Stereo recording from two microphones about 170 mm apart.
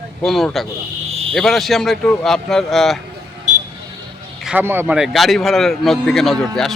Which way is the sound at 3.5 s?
45° right (ahead or behind).